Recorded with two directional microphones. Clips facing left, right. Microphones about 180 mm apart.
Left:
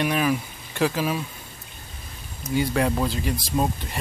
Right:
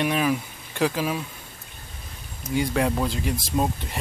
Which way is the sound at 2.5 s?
Centre (ahead or behind).